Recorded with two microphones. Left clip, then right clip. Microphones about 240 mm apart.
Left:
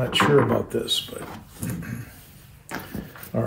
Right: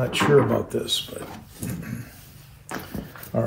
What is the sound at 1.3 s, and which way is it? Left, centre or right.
Dog, centre.